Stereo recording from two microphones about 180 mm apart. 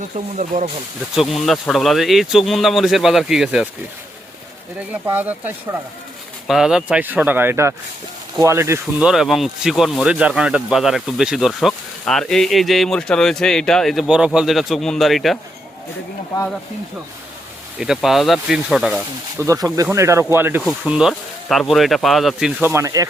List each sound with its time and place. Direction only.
0.3 s speech: 40° right (ahead or behind)
1.1 s speech: centre (ahead or behind)
4.8 s speech: 10° right (ahead or behind)
9.0 s speech: centre (ahead or behind)
17.7 s speech: centre (ahead or behind)
19.4 s speech: 15° right (ahead or behind)
20.6 s speech: centre (ahead or behind)
22.7 s speech: 15° right (ahead or behind)